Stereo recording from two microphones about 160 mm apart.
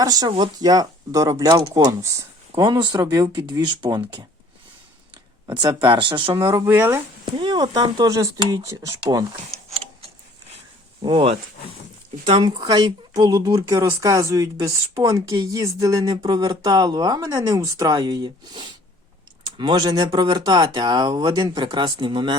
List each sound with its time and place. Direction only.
0.0 s speech: 25° right (ahead or behind)
5.5 s speech: 30° right (ahead or behind)
6.7 s speech: 15° right (ahead or behind)
7.3 s speech: 30° right (ahead or behind)
11.0 s speech: 35° right (ahead or behind)